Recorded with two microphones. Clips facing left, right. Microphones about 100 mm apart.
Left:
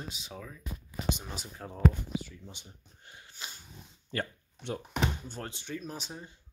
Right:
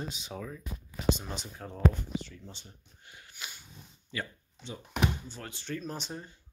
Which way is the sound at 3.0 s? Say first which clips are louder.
Even; 30° left (ahead or behind).